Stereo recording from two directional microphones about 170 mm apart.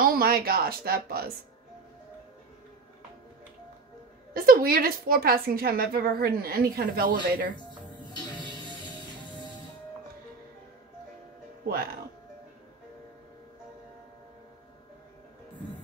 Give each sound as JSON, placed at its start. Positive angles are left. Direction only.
{"t": 0.0, "sound": "a woman's voice", "side_deg": -60}
{"t": 4.3, "sound": "a woman's voice", "side_deg": -60}
{"t": 7.5, "sound": "music", "side_deg": 25}